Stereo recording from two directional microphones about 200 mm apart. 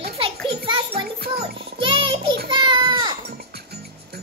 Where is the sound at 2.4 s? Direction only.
25° right (ahead or behind).